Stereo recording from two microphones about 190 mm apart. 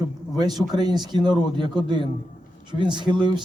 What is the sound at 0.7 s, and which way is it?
Speech, 20° right (ahead or behind).